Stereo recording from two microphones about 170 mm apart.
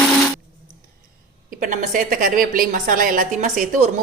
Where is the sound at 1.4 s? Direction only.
50° right (ahead or behind).